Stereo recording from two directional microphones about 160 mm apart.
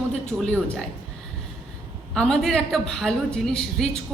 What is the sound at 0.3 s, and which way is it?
Speech, 5° right (ahead or behind).